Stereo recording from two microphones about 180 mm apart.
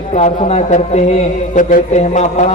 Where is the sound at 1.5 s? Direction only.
45° left (ahead or behind).